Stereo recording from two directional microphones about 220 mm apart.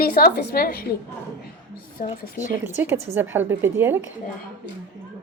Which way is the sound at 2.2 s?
35° left (ahead or behind).